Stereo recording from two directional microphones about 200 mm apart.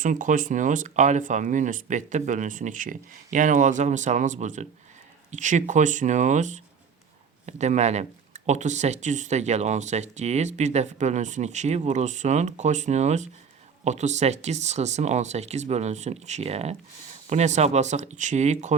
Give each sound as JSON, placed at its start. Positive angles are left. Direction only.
{"t": 0.0, "sound": "speech", "side_deg": -40}